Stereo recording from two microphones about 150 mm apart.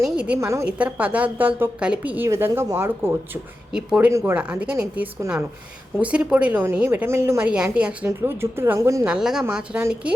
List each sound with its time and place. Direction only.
0.0 s a woman's voice: 5° right (ahead or behind)
0.3 s a woman's voice: 20° right (ahead or behind)
3.7 s a woman's voice: 5° right (ahead or behind)
5.2 s a woman's voice: 20° right (ahead or behind)
6.0 s a woman's voice: 10° right (ahead or behind)
7.4 s a woman's voice: 5° right (ahead or behind)
9.0 s a woman's voice: 5° right (ahead or behind)